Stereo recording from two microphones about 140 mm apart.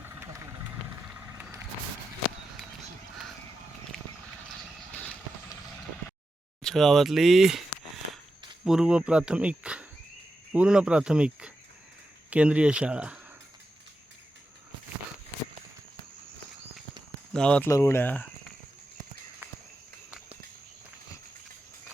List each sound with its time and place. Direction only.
0.0 s vehicle: 15° right (ahead or behind)
4.9 s vehicle: 10° left (ahead or behind)
6.6 s speech: centre (ahead or behind)
8.6 s speech: 5° right (ahead or behind)
17.3 s speech: 5° left (ahead or behind)
17.7 s speech: 20° left (ahead or behind)